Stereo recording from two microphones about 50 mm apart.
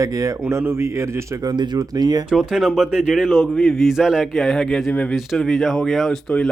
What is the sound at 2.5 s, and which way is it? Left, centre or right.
A man's voice, centre.